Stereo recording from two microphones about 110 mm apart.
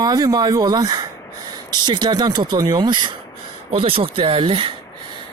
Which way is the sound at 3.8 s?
55° right (ahead or behind).